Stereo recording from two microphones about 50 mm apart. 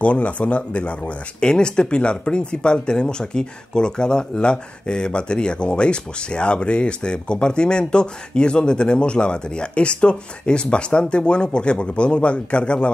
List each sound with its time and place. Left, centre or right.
0.0 s speech: left